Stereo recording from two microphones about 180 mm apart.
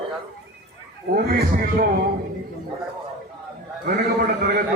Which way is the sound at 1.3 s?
55° right (ahead or behind).